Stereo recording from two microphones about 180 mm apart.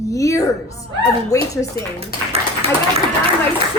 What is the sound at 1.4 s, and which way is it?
Speech, 30° right (ahead or behind).